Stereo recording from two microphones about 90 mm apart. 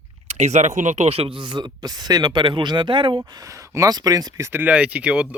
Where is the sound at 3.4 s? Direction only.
40° right (ahead or behind).